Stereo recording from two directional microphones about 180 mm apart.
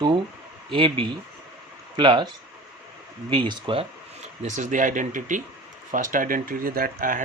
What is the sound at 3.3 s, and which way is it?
Speech, 25° right (ahead or behind).